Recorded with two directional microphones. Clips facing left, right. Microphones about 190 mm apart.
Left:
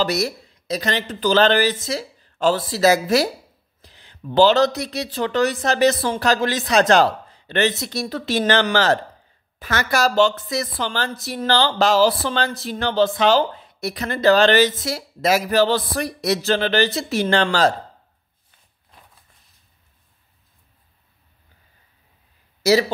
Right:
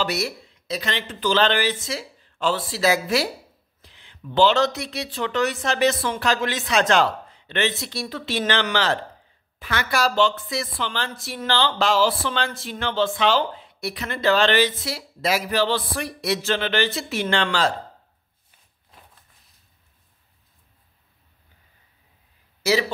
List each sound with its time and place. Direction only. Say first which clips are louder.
0.0 s speech: left 4 dB; 40° left (ahead or behind)
22.6 s speech: left 5 dB; 40° left (ahead or behind)